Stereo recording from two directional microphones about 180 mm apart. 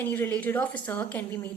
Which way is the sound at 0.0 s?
10° left (ahead or behind).